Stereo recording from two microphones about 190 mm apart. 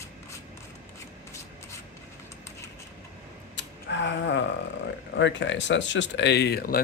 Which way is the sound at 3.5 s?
70° left (ahead or behind).